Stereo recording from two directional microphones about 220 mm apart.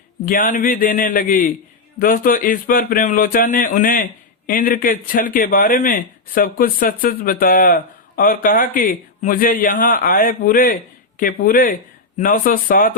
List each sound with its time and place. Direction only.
0.3 s speech: 35° left (ahead or behind)